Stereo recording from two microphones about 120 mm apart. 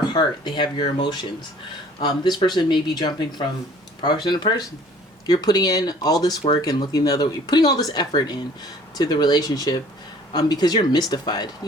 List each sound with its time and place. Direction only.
0.1 s speech: 35° left (ahead or behind)